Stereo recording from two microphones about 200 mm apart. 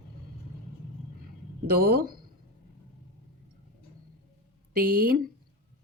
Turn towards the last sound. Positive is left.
turn(degrees=-45)  # may be behind; listen again after turning